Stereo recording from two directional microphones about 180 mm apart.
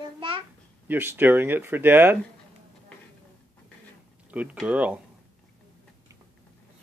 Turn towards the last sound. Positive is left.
turn(degrees=-5)  # may be behind; listen again after turning